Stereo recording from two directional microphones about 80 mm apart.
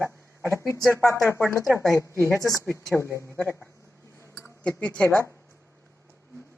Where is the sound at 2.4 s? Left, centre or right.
Right.